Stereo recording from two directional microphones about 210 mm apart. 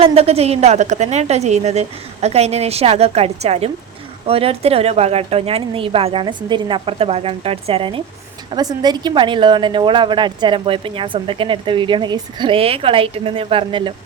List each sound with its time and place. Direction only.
0.0 s a woman's voice: 30° right (ahead or behind)